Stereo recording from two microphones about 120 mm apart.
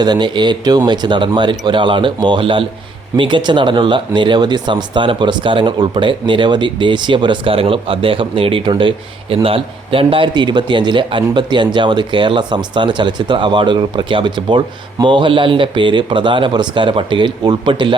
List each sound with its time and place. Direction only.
0.0 s a man's voice: 40° right (ahead or behind)